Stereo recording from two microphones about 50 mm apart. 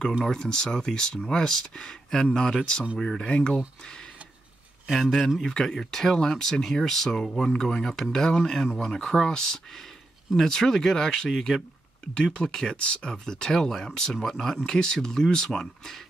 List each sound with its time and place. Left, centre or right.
0.3 s speech: centre
4.9 s speech: centre
5.4 s speech: centre